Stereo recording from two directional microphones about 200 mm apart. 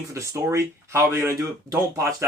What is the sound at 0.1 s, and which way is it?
Speech, 15° right (ahead or behind).